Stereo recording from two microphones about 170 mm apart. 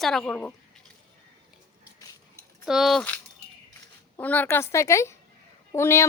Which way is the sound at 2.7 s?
Centre (ahead or behind).